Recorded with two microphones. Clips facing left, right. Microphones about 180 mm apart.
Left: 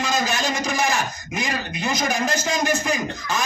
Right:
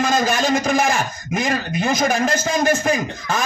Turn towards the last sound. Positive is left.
turn(degrees=-50)  # may be behind; listen again after turning